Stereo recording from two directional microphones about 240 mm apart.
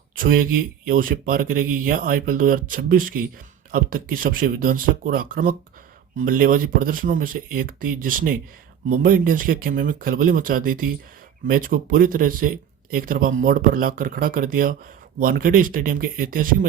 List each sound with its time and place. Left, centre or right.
0.2 s speech: right